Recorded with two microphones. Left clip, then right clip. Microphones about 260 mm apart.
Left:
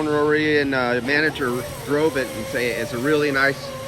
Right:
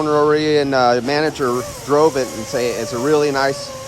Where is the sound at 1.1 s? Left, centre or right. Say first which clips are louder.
Right 2 dB; right.